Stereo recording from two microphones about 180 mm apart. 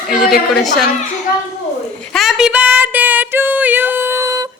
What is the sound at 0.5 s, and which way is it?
Speech, centre (ahead or behind).